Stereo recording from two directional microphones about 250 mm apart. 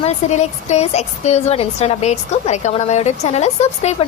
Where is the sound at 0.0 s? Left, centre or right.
Left.